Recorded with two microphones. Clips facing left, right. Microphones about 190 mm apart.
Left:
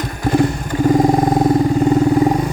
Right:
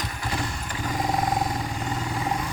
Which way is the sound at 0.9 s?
50° left (ahead or behind).